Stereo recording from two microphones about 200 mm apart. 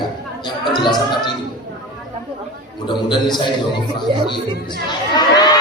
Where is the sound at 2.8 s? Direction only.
20° left (ahead or behind).